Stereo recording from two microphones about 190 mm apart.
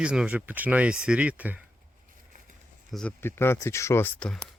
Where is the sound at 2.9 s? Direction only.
10° left (ahead or behind).